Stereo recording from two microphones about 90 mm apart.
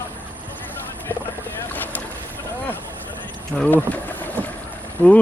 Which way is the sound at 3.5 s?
15° left (ahead or behind).